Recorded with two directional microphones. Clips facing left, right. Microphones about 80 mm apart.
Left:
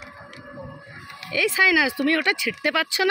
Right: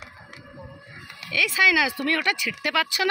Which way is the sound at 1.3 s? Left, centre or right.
Left.